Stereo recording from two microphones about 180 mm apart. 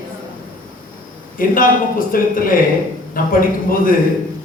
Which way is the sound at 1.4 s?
50° left (ahead or behind).